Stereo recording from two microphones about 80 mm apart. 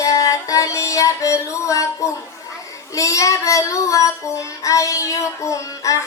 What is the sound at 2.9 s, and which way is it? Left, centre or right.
Child singing, left.